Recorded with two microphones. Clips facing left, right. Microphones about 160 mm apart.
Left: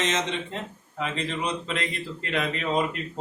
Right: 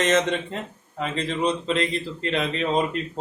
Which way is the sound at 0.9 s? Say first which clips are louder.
Right 3 dB; 35° right (ahead or behind).